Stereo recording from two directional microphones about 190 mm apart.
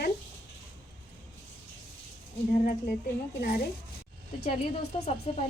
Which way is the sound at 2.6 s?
45° left (ahead or behind).